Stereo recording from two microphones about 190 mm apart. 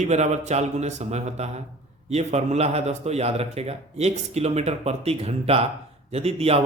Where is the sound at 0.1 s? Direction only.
35° right (ahead or behind).